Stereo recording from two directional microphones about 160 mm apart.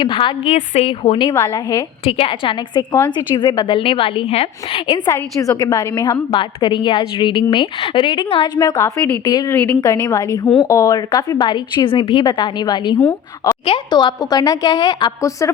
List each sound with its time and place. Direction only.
0.0 s a woman's voice: 30° left (ahead or behind)
0.5 s a woman's voice: 40° left (ahead or behind)
1.3 s a woman's voice: 20° left (ahead or behind)
2.0 s a woman's voice: 35° left (ahead or behind)
5.0 s a woman's voice: 20° left (ahead or behind)
13.0 s speech: 10° left (ahead or behind)
13.7 s a woman's voice: 30° left (ahead or behind)